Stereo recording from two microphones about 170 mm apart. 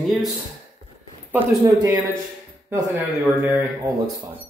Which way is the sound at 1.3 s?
20° right (ahead or behind).